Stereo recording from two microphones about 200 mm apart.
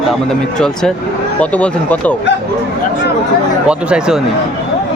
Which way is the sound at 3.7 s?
5° right (ahead or behind).